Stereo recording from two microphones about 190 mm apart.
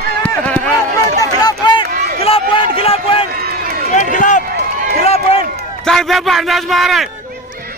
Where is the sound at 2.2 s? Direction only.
30° left (ahead or behind).